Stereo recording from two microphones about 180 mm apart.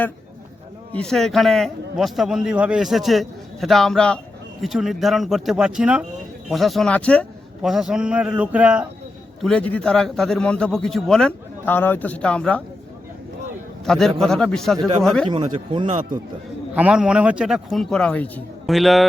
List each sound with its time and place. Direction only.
0.9 s a man's voice: 5° left (ahead or behind)
9.4 s a man's voice: 5° left (ahead or behind)
13.8 s a man's voice: 5° left (ahead or behind)
15.5 s speech: 25° right (ahead or behind)
16.7 s a man's voice: 5° right (ahead or behind)